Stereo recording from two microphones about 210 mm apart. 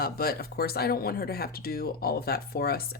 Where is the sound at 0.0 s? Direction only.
45° left (ahead or behind).